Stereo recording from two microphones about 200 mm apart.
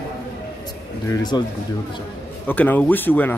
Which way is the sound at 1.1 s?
20° left (ahead or behind).